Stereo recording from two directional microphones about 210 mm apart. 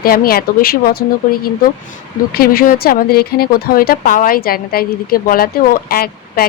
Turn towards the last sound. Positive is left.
turn(degrees=45)  # may be behind; listen again after turning